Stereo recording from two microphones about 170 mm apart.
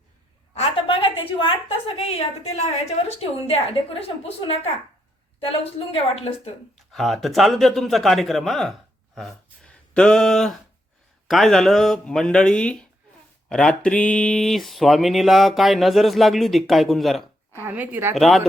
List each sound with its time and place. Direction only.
0.6 s a sound: 30° left (ahead or behind)
2.0 s a woman's voice: 35° left (ahead or behind)
6.9 s speech: centre (ahead or behind)
17.6 s a woman's voice: 10° right (ahead or behind)
18.1 s speech: centre (ahead or behind)